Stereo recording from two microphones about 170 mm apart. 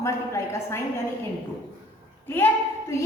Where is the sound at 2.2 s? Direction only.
15° left (ahead or behind).